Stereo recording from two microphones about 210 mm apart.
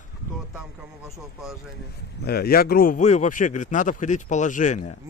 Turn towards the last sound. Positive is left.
turn(degrees=35)  # may be behind; listen again after turning